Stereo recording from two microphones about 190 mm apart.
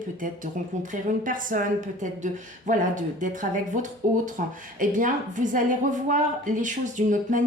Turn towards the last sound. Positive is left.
turn(degrees=-45)  # may be behind; listen again after turning